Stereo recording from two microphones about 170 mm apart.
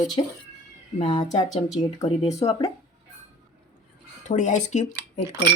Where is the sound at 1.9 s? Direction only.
20° left (ahead or behind).